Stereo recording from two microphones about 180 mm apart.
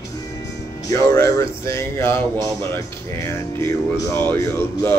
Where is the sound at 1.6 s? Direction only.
15° left (ahead or behind).